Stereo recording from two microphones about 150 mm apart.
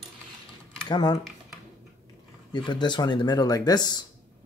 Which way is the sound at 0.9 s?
30° left (ahead or behind).